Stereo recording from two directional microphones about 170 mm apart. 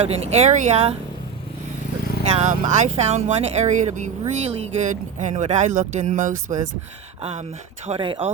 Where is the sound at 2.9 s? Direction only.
40° right (ahead or behind).